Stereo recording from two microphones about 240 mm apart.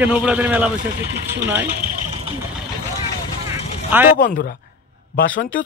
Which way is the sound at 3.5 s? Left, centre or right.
Centre.